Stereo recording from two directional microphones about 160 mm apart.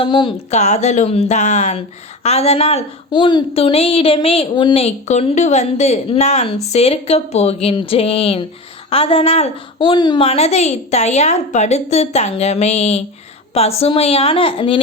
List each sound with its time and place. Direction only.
0.0 s a woman's voice: 35° left (ahead or behind)
0.5 s a woman's voice: 45° left (ahead or behind); by 10.2 s 30° left (ahead or behind)
10.2 s a woman's voice: 40° left (ahead or behind)